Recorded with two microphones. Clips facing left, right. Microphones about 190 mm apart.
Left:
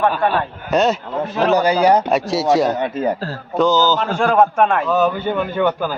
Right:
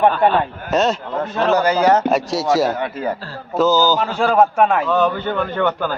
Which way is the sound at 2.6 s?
20° left (ahead or behind).